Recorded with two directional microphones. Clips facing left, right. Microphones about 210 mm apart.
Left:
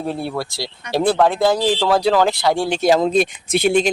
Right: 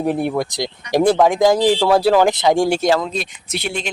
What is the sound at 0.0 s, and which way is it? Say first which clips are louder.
Speech: right 5 dB; 15° right (ahead or behind).